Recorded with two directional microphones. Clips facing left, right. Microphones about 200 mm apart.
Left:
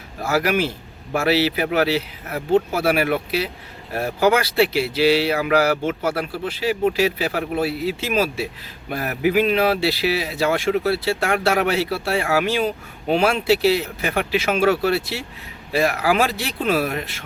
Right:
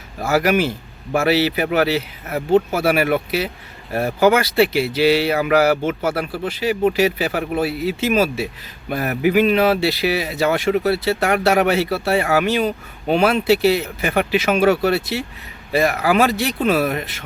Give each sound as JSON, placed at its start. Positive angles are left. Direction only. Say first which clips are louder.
{"t": 0.3, "sound": "speech", "louder": "right 3 dB", "side_deg": 0}
{"t": 13.6, "sound": "speech", "louder": "right 2 dB", "side_deg": -55}
{"t": 14.3, "sound": "speech", "louder": "right 2 dB", "side_deg": 0}